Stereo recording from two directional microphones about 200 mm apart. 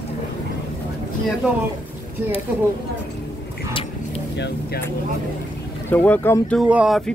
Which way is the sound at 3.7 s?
25° left (ahead or behind).